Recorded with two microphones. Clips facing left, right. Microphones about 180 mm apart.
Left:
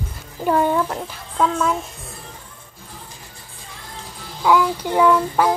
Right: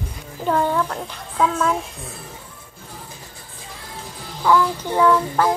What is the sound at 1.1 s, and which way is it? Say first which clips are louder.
Speech: right 1 dB; centre (ahead or behind).